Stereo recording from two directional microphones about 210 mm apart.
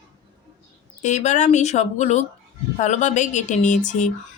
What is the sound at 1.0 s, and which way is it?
Speech, 35° left (ahead or behind).